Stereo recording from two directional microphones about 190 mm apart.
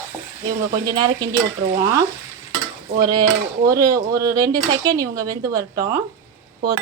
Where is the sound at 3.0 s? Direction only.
20° right (ahead or behind).